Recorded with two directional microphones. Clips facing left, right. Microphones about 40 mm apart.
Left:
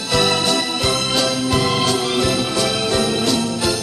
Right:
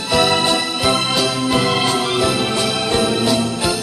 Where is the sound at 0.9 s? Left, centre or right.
Right.